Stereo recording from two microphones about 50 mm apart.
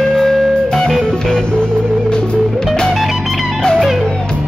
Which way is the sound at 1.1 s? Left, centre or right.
Centre.